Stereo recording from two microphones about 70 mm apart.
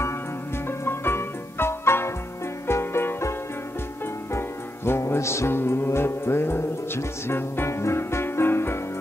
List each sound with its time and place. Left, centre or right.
0.7 s music: left